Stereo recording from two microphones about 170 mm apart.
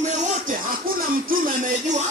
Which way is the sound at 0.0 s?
40° right (ahead or behind).